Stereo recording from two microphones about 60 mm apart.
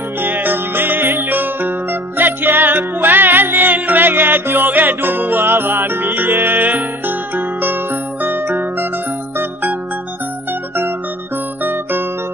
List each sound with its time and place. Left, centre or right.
0.2 s music: right
11.6 s music: right